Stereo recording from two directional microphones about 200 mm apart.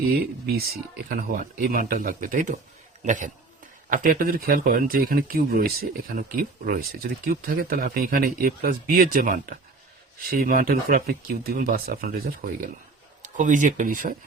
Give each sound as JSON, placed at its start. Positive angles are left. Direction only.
{"t": 0.1, "sound": "speech", "side_deg": -50}